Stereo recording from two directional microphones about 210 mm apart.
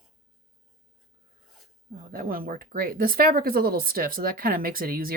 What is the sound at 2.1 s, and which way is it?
Speech, 45° right (ahead or behind).